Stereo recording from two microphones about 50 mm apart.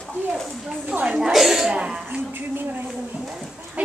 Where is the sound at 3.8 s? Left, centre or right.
Right.